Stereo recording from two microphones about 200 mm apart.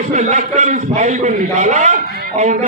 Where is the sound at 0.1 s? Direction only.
35° right (ahead or behind).